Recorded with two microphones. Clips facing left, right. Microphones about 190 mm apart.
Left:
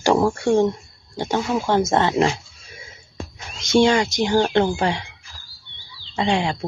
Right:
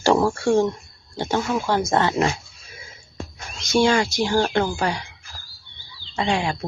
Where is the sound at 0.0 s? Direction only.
10° left (ahead or behind).